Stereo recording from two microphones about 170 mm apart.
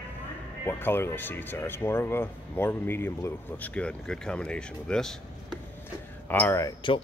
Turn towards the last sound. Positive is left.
turn(degrees=20)  # may be behind; listen again after turning